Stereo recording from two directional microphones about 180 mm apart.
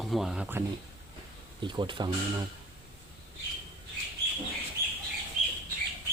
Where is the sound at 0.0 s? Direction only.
Centre (ahead or behind).